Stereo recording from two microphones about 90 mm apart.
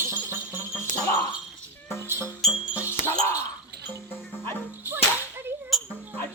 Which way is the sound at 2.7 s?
25° left (ahead or behind).